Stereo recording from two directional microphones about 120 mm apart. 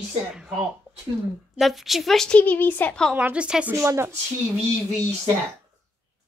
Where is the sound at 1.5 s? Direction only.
Centre (ahead or behind).